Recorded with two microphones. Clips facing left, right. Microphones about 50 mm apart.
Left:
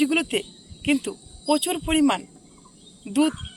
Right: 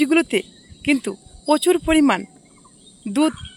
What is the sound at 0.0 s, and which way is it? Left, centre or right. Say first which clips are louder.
Speech: right 5 dB; right.